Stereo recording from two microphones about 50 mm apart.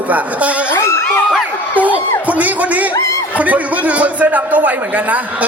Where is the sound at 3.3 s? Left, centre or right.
Right.